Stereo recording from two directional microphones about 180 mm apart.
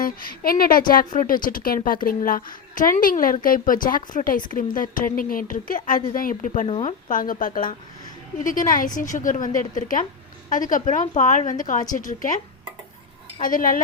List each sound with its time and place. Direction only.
0.0 s speech: 55° left (ahead or behind); by 6.9 s 40° left (ahead or behind)
7.1 s speech: 50° left (ahead or behind)
13.4 s speech: 50° left (ahead or behind)